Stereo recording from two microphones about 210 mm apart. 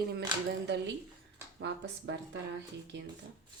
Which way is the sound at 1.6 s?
60° right (ahead or behind).